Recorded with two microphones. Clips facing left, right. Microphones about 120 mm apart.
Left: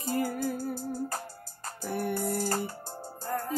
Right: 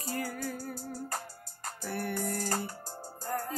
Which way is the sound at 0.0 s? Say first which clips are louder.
Left 6 dB; 25° left (ahead or behind).